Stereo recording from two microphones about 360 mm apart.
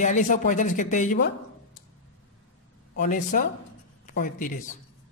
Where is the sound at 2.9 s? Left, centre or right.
Left.